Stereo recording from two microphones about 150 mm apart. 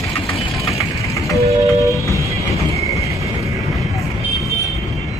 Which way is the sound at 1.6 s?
20° right (ahead or behind).